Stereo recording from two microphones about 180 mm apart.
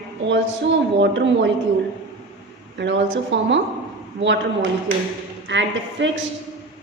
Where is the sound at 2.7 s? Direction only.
90° right.